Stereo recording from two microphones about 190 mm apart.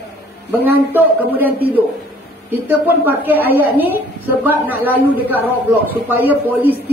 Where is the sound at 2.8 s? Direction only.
10° right (ahead or behind).